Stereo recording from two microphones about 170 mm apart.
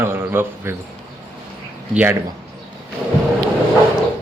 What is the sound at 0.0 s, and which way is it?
Speech, 15° right (ahead or behind).